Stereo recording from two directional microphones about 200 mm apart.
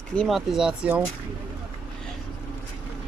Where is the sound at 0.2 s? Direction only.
Centre (ahead or behind).